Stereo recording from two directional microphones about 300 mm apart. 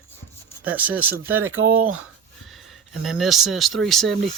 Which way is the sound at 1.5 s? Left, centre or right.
Right.